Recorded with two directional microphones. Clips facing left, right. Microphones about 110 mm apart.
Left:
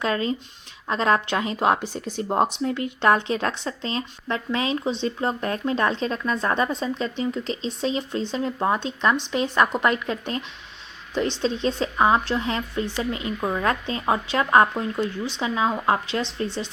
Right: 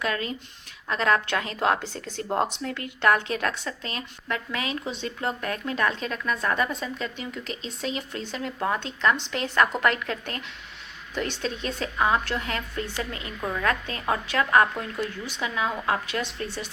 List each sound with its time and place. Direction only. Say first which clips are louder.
0.0 s speech: left 5 dB; 25° left (ahead or behind)